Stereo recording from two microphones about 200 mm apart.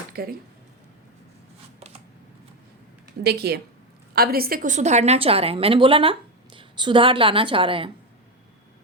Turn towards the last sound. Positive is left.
turn(degrees=-25)  # may be behind; listen again after turning